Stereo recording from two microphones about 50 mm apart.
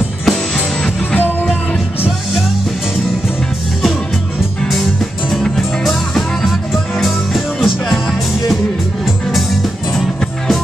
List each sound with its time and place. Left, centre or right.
1.1 s music: left
5.6 s music: centre
9.0 s music: centre